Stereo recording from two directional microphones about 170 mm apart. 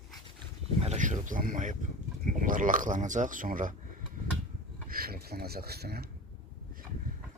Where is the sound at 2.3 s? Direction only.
50° right (ahead or behind).